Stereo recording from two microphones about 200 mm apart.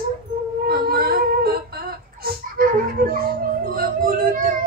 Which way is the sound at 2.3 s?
45° right (ahead or behind).